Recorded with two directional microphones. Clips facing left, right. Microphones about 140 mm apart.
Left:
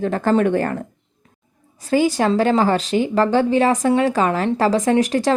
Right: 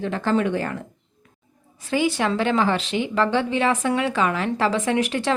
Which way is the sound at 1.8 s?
40° left (ahead or behind).